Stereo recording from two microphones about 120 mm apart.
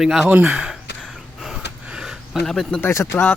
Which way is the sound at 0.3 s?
15° right (ahead or behind).